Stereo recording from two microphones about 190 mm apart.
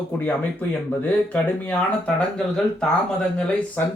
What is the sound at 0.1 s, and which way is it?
Speech, 10° left (ahead or behind).